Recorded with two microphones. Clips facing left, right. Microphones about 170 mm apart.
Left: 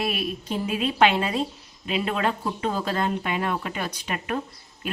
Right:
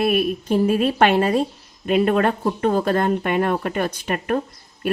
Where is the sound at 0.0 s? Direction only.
55° right (ahead or behind).